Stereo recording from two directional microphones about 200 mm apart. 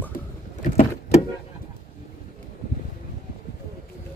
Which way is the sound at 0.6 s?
40° left (ahead or behind).